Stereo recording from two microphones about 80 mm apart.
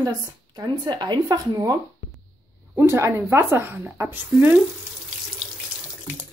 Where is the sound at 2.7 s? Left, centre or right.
Right.